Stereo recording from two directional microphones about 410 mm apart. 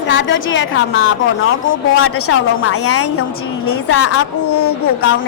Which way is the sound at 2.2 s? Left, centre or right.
Left.